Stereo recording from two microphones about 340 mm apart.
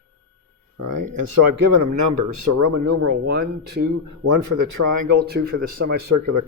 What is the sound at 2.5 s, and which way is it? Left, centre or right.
Speech, right.